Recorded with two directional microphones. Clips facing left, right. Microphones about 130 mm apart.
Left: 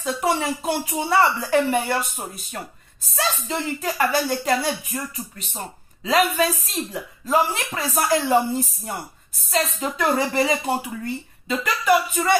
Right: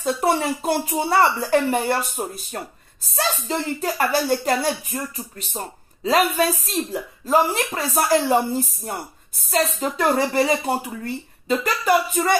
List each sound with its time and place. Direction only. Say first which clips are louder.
0.0 s speech: right 2 dB; 40° right (ahead or behind)